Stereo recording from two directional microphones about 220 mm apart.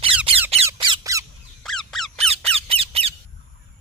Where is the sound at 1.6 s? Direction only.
Centre (ahead or behind).